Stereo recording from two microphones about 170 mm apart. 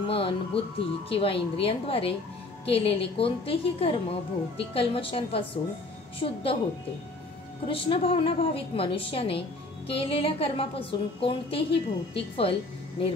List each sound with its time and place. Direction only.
0.0 s music: 35° left (ahead or behind)
0.7 s a woman's voice: 35° left (ahead or behind)
7.6 s a woman's voice: 30° left (ahead or behind)